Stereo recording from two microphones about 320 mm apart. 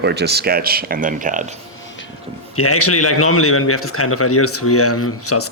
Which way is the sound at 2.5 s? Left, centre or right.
Left.